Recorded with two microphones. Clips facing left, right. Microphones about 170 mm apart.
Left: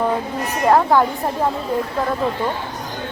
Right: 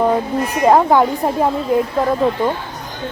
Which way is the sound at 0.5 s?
15° right (ahead or behind).